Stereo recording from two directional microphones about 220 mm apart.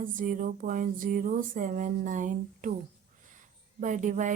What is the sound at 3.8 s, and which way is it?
Speech, 35° right (ahead or behind).